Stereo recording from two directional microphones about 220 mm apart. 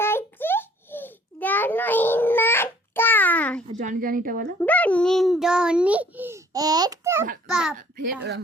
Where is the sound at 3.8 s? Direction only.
35° right (ahead or behind).